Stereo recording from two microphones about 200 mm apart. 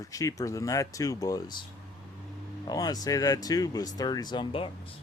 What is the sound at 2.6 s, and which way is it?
Speech, 20° left (ahead or behind).